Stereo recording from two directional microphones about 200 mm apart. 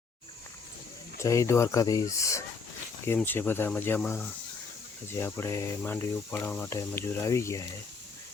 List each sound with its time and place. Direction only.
1.2 s speech: 15° left (ahead or behind)